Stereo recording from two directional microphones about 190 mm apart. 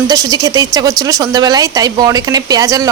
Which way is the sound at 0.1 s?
20° right (ahead or behind).